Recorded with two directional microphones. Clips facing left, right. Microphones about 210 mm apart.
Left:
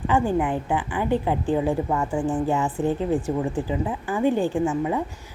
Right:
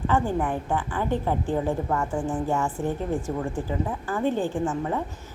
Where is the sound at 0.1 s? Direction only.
15° left (ahead or behind).